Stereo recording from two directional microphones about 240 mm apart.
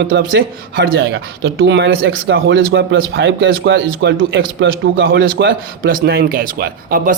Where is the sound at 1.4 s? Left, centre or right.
Right.